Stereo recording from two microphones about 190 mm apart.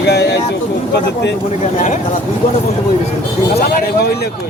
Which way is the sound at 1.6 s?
40° left (ahead or behind).